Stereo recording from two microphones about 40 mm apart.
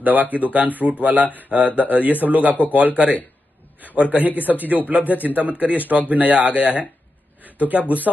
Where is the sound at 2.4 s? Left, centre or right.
Right.